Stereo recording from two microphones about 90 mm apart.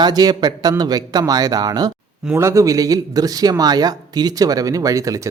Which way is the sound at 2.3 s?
30° right (ahead or behind).